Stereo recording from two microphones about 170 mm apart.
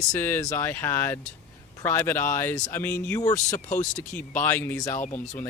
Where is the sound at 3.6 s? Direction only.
45° left (ahead or behind).